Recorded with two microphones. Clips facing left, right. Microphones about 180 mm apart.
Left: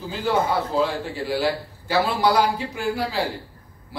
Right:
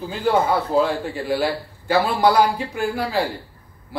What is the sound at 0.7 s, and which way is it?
A man's voice, 50° right (ahead or behind).